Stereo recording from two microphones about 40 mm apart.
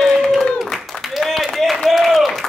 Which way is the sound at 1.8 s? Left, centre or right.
Centre.